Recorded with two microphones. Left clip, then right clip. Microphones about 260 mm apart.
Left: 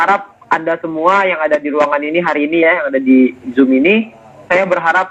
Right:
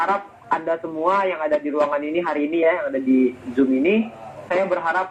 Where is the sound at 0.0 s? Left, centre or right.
Left.